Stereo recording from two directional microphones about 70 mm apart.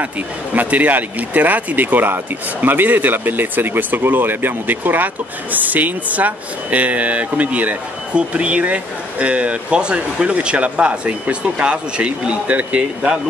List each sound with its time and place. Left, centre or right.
0.6 s speech: right